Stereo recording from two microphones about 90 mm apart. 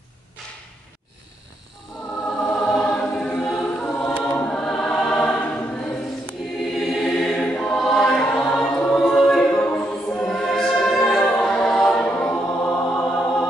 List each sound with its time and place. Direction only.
2.2 s choir: 15° left (ahead or behind)
9.0 s a capella: 5° left (ahead or behind)
9.6 s choir: 20° left (ahead or behind)
10.2 s choir: 5° left (ahead or behind)
12.2 s choir: 15° left (ahead or behind)